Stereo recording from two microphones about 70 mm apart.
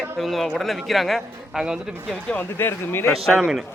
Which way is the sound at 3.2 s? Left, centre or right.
Centre.